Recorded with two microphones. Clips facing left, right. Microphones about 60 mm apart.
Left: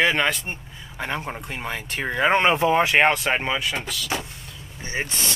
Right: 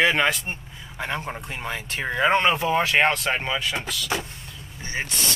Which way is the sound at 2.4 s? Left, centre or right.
Left.